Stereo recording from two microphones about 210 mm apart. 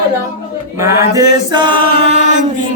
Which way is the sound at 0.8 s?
15° right (ahead or behind).